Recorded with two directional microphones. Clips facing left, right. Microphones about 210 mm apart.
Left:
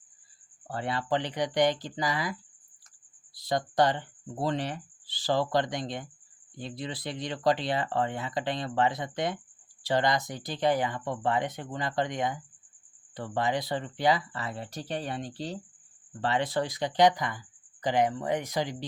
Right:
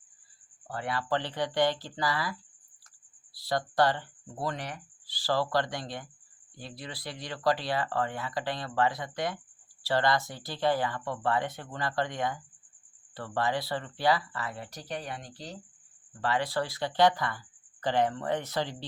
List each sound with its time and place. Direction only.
0.7 s speech: 25° left (ahead or behind)
3.3 s speech: 20° left (ahead or behind)